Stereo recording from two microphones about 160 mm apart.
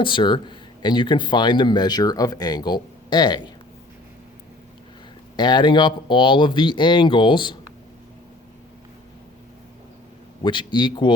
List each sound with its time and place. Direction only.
0.0 s speech: 30° left (ahead or behind)
5.4 s speech: 30° left (ahead or behind)
10.4 s speech: 30° left (ahead or behind)